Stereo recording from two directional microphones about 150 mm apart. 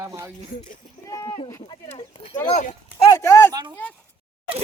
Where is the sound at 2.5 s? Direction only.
55° left (ahead or behind).